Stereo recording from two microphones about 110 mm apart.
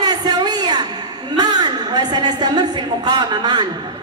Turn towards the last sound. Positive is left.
turn(degrees=-40)  # may be behind; listen again after turning